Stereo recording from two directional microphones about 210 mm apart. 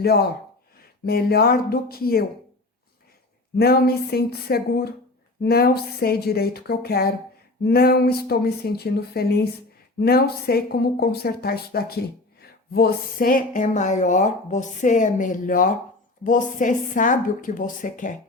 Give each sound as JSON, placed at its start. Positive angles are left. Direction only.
{"t": 0.8, "sound": "speech", "side_deg": 45}
{"t": 3.6, "sound": "speech", "side_deg": 45}